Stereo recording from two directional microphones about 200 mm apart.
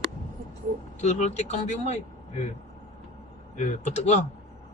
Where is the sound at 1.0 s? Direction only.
35° left (ahead or behind).